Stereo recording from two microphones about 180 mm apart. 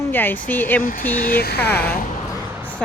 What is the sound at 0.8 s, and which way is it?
Speech, 55° left (ahead or behind).